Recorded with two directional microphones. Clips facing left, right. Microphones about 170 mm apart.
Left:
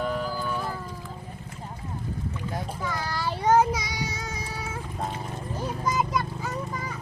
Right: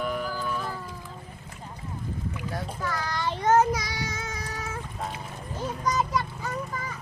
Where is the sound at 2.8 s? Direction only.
10° left (ahead or behind).